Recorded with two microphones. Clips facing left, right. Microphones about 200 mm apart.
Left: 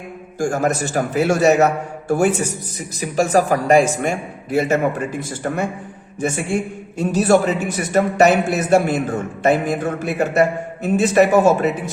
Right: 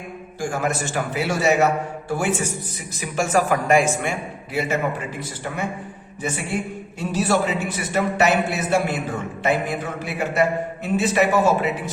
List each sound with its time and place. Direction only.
0.3 s a man's voice: 45° left (ahead or behind)